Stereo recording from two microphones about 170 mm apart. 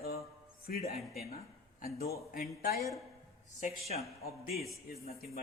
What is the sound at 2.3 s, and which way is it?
Speech, 60° left (ahead or behind).